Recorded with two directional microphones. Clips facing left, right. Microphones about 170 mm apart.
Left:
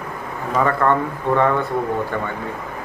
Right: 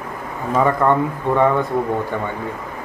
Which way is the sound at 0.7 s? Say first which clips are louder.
Right 1 dB; 15° right (ahead or behind).